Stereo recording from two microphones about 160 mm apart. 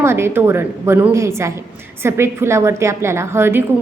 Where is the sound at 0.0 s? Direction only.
15° right (ahead or behind).